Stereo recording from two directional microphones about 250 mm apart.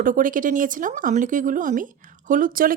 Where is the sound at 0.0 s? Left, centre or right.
Right.